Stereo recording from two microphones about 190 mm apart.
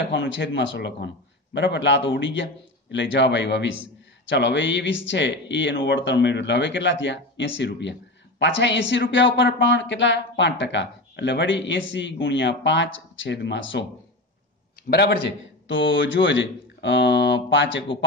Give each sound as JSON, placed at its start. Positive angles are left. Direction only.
{"t": 0.0, "sound": "speech", "side_deg": 70}
{"t": 14.9, "sound": "a man's voice", "side_deg": 65}
{"t": 15.7, "sound": "speech", "side_deg": 75}